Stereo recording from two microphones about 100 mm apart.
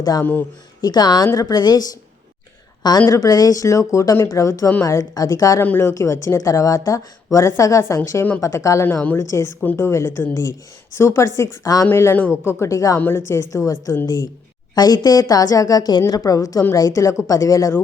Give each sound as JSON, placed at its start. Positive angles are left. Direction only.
{"t": 0.0, "sound": "speech", "side_deg": 35}
{"t": 3.1, "sound": "speech", "side_deg": 40}
{"t": 5.6, "sound": "speech", "side_deg": 25}
{"t": 8.9, "sound": "a woman's voice", "side_deg": 15}
{"t": 11.9, "sound": "speech", "side_deg": 20}
{"t": 13.0, "sound": "speech", "side_deg": 20}